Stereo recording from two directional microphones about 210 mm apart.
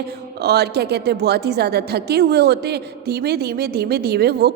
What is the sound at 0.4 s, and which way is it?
A woman's voice, 50° right (ahead or behind).